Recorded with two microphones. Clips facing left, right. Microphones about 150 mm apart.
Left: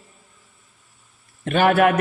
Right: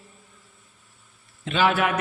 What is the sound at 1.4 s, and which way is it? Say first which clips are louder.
Speech: left 6 dB; 55° left (ahead or behind).